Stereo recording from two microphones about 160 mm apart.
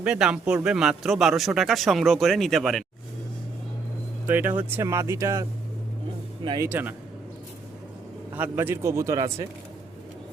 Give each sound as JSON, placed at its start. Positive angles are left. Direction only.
{"t": 0.0, "sound": "a man's voice", "side_deg": -5}
{"t": 4.3, "sound": "speech", "side_deg": -10}
{"t": 6.7, "sound": "speech", "side_deg": -10}
{"t": 8.3, "sound": "speech", "side_deg": -10}